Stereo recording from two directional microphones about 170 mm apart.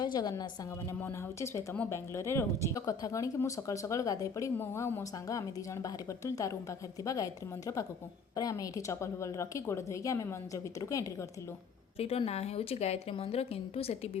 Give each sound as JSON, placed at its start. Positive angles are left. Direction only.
{"t": 0.0, "sound": "a woman's voice", "side_deg": 25}
{"t": 11.9, "sound": "a woman's voice", "side_deg": 35}